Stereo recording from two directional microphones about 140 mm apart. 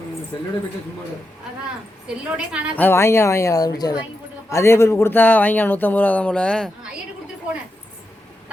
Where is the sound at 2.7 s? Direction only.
15° left (ahead or behind).